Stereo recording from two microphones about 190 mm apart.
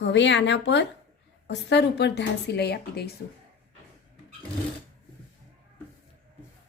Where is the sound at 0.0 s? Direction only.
70° left (ahead or behind).